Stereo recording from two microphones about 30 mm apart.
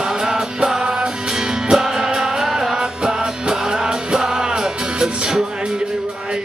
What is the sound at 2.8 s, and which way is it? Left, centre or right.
Music, right.